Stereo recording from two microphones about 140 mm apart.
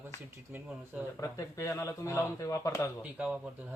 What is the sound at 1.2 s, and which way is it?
Speech, 20° left (ahead or behind).